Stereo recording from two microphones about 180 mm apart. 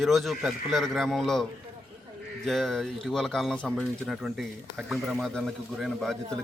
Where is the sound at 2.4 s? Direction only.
Centre (ahead or behind).